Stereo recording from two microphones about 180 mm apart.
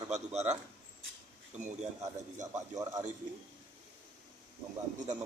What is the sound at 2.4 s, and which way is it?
Speech, 20° right (ahead or behind).